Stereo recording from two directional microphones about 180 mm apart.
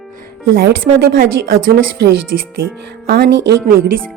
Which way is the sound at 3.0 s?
60° right (ahead or behind).